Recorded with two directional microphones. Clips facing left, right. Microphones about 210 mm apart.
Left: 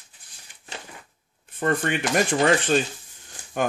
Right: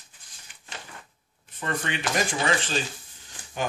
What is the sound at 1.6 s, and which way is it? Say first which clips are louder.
Speech: left 7 dB; 50° left (ahead or behind).